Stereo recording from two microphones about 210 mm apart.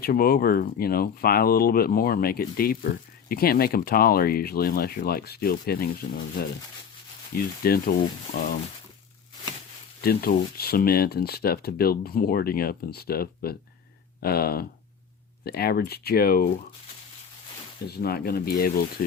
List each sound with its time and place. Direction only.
0.0 s speech: 45° left (ahead or behind)
7.3 s speech: 45° left (ahead or behind)
10.0 s speech: 45° left (ahead or behind)
17.8 s speech: 50° left (ahead or behind)